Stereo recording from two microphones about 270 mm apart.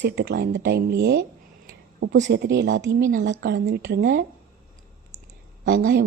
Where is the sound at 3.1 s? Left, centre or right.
Right.